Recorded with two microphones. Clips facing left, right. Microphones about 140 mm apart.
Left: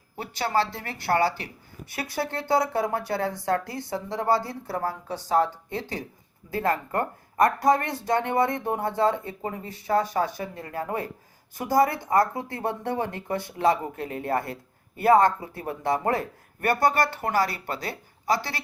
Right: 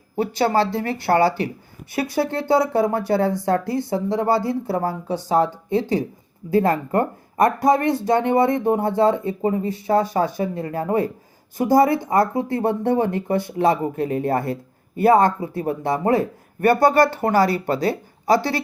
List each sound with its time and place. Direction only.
0.2 s speech: 25° right (ahead or behind)
2.0 s speech: 25° right (ahead or behind)